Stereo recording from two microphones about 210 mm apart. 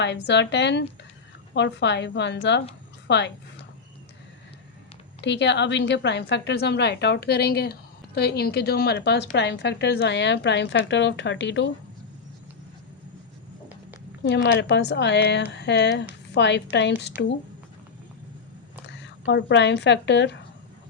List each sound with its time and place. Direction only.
0.0 s a woman's voice: 55° left (ahead or behind)
5.2 s a woman's voice: 55° left (ahead or behind)
14.3 s a woman's voice: 55° left (ahead or behind)
18.9 s speech: 60° left (ahead or behind)